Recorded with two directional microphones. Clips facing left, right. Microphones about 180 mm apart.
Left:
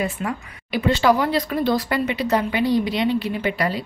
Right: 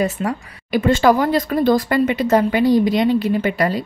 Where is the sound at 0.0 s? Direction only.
40° right (ahead or behind).